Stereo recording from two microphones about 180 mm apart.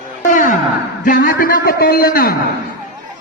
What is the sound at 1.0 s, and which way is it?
A man's voice, 50° left (ahead or behind).